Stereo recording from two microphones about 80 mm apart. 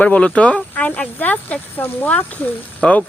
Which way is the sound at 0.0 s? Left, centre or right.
Centre.